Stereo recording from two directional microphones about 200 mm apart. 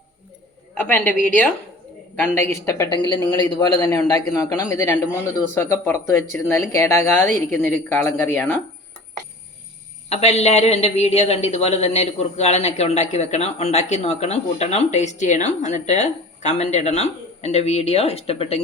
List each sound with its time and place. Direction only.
0.7 s a woman's voice: 5° left (ahead or behind)
10.1 s a man's voice: 30° left (ahead or behind)